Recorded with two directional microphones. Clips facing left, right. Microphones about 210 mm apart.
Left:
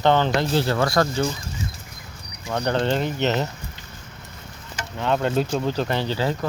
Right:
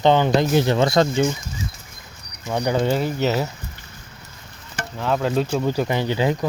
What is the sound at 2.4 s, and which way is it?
Speech, 10° right (ahead or behind).